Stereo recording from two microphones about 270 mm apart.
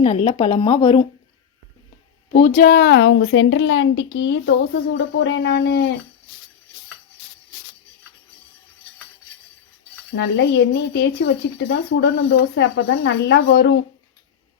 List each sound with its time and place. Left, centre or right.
0.0 s a woman's voice: left
2.3 s a woman's voice: left
10.2 s a woman's voice: left